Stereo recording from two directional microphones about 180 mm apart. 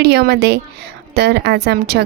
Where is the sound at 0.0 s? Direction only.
65° right (ahead or behind).